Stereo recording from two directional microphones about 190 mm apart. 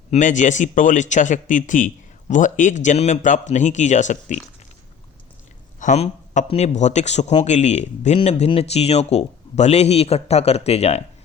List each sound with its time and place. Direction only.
0.1 s speech: 40° left (ahead or behind)
5.8 s speech: 40° left (ahead or behind)